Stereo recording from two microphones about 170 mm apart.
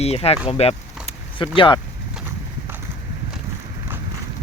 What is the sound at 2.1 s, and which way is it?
Clip-clop, 15° right (ahead or behind).